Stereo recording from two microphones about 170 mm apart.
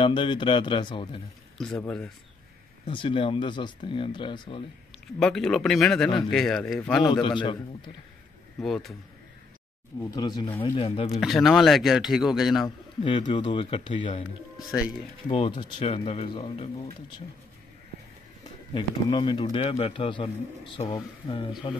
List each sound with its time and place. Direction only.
0.0 s speech: 30° left (ahead or behind)
1.6 s speech: 5° left (ahead or behind)
2.9 s speech: 30° left (ahead or behind)
5.2 s speech: 5° left (ahead or behind)
7.1 s speech: 30° left (ahead or behind)
8.6 s speech: centre (ahead or behind)
10.1 s speech: 25° left (ahead or behind)
11.1 s speech: centre (ahead or behind)
12.6 s a man's voice: 30° left (ahead or behind)
15.2 s speech: 30° left (ahead or behind)
18.7 s speech: 25° left (ahead or behind)